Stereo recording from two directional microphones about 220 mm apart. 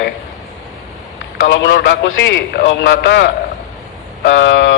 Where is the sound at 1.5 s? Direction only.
50° left (ahead or behind).